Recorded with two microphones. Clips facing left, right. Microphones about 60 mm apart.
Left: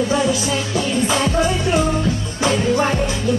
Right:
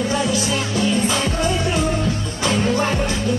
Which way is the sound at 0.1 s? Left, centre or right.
Left.